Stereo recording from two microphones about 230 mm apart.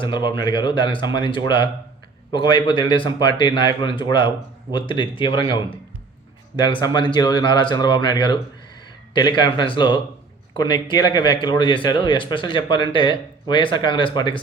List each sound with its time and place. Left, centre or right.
0.0 s speech: centre